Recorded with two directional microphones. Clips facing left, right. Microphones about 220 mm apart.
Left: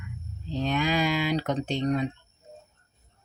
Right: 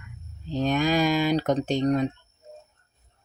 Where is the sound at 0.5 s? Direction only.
45° right (ahead or behind).